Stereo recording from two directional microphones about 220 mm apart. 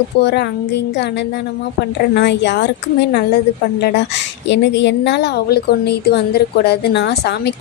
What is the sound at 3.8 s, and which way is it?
Speech, 55° left (ahead or behind).